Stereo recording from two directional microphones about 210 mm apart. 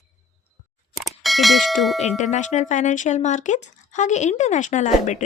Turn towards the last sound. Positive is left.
turn(degrees=35)  # may be behind; listen again after turning